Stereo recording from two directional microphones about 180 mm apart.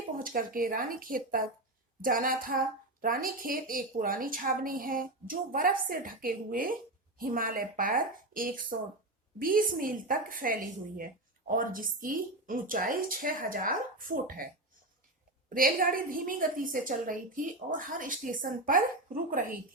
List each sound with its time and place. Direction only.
0.2 s a woman's voice: 50° right (ahead or behind)